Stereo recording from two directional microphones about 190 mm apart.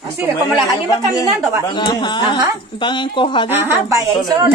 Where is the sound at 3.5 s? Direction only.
10° right (ahead or behind).